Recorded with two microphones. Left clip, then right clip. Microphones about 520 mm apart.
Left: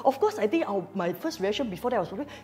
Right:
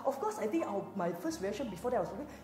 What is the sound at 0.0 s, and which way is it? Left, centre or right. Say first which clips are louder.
A woman's voice: left 10 dB; left.